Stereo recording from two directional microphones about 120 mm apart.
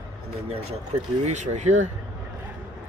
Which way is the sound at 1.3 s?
80° right.